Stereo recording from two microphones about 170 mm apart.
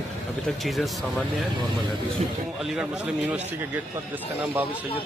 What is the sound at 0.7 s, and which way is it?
Speech, centre (ahead or behind).